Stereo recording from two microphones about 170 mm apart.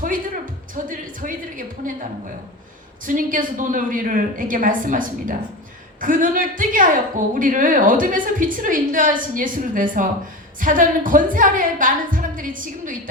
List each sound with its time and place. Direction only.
0.7 s a woman's voice: 55° right (ahead or behind)
3.0 s a woman's voice: 50° right (ahead or behind)